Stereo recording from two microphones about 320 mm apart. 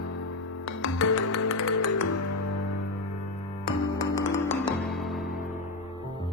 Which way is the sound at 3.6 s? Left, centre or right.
Centre.